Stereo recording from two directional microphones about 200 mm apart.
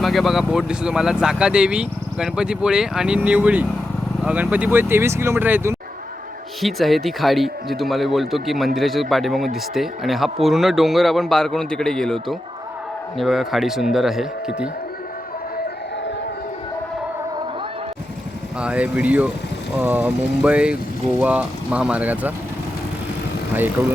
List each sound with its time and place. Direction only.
0.0 s speech: centre (ahead or behind)
6.6 s speech: centre (ahead or behind)
18.6 s speech: 5° right (ahead or behind)